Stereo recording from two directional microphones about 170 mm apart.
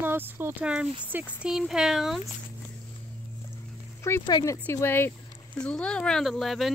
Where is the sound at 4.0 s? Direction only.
15° left (ahead or behind).